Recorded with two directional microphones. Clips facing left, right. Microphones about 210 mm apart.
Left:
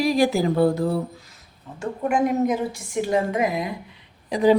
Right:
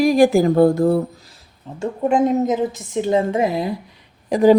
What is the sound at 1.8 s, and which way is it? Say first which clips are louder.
A woman's voice: right 5 dB; 25° right (ahead or behind).